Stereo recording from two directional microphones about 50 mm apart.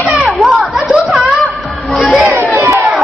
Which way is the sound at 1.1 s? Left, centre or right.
Centre.